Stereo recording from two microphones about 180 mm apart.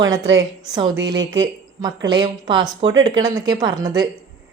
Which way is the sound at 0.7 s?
20° right (ahead or behind).